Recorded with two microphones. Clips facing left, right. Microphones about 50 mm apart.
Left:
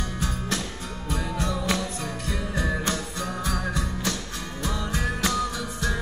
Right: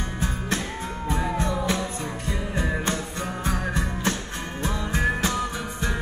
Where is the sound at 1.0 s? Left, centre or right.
Right.